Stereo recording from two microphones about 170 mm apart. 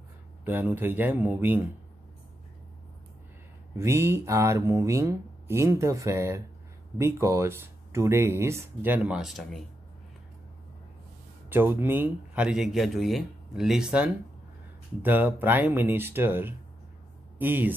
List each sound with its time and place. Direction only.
0.5 s speech: 10° right (ahead or behind)
3.7 s speech: 15° right (ahead or behind); by 9.6 s centre (ahead or behind)
11.4 s speech: 10° right (ahead or behind)